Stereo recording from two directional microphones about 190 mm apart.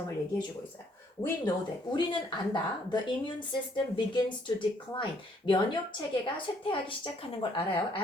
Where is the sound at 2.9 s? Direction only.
25° left (ahead or behind).